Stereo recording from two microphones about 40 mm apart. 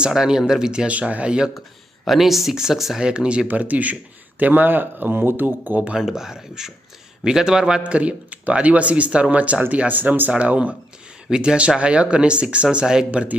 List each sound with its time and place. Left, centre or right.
0.0 s speech: centre
0.9 s speech: right
2.0 s speech: centre
3.0 s speech: right
3.4 s speech: right
6.0 s speech: centre
7.9 s speech: right
9.9 s speech: right
11.3 s speech: right